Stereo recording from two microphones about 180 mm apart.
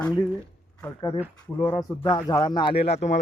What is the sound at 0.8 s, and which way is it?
Speech, 25° left (ahead or behind).